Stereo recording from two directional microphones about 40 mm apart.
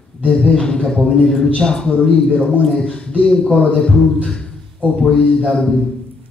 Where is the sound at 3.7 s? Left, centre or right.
Centre.